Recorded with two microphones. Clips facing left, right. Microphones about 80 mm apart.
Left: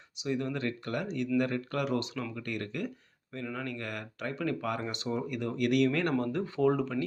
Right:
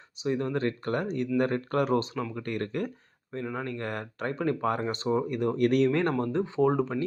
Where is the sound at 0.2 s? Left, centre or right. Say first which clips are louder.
Right 4 dB; right.